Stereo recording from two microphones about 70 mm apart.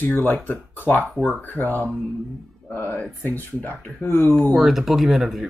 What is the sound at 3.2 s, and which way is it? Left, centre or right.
Speech, left.